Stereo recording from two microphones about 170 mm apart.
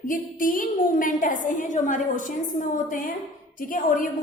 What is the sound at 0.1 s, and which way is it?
A woman's voice, 55° left (ahead or behind).